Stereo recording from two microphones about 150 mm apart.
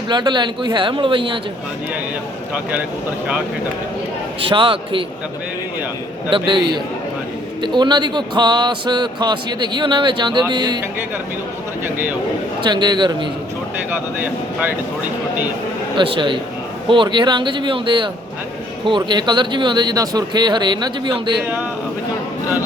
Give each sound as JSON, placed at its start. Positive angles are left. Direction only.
{"t": 0.1, "sound": "speech", "side_deg": -30}
{"t": 4.4, "sound": "speech", "side_deg": -35}
{"t": 6.3, "sound": "a man's voice", "side_deg": -35}
{"t": 12.6, "sound": "a man's voice", "side_deg": -30}
{"t": 13.9, "sound": "speech", "side_deg": -10}
{"t": 16.0, "sound": "speech", "side_deg": -35}